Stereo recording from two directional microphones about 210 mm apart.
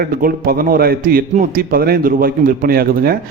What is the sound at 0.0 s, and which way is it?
A man's voice, 45° right (ahead or behind).